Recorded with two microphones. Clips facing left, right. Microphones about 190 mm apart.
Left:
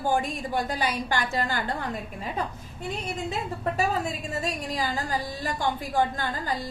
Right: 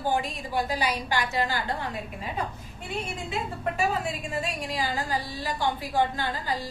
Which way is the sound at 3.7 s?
40° left (ahead or behind).